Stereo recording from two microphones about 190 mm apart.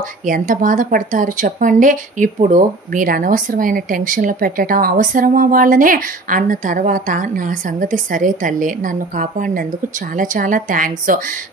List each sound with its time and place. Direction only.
0.2 s speech: 45° right (ahead or behind)